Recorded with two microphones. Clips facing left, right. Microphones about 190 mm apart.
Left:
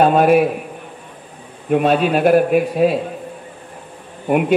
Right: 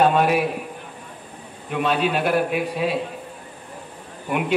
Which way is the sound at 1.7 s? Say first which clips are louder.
Left 7 dB; 50° left (ahead or behind).